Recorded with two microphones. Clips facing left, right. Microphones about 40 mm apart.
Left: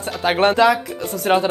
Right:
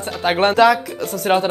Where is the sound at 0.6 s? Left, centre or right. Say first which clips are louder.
Right 2 dB; centre.